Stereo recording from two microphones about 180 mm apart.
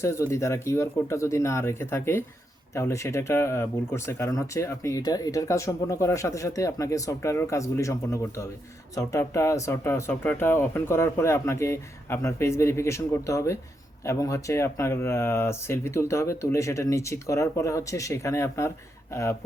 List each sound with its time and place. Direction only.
0.0 s speech: 15° left (ahead or behind)